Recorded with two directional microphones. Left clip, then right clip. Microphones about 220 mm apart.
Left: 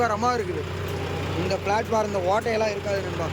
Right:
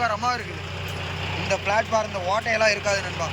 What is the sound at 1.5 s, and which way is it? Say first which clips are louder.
Speech: right 2 dB; 10° left (ahead or behind).